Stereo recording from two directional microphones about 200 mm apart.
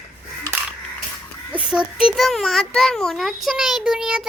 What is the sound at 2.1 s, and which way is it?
A child's voice, centre (ahead or behind).